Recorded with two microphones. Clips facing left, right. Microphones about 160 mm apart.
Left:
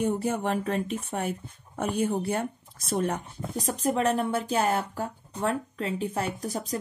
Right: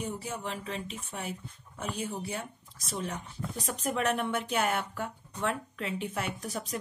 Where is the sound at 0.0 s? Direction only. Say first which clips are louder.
Left 10 dB; 55° left (ahead or behind).